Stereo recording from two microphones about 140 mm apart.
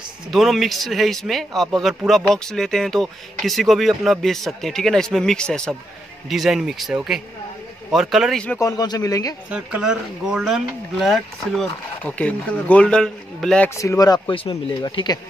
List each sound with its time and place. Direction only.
0.3 s speech: centre (ahead or behind)
8.5 s speech: 25° left (ahead or behind)
9.5 s speech: 5° right (ahead or behind)
13.7 s speech: 25° left (ahead or behind)